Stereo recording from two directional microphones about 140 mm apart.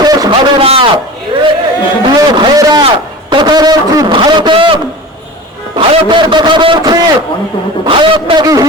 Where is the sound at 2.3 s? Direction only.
35° right (ahead or behind).